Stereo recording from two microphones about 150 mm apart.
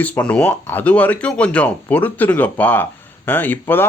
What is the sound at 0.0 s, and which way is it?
Speech, 10° left (ahead or behind).